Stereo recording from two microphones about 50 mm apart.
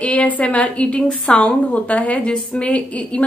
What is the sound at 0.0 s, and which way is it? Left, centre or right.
A woman's voice, left.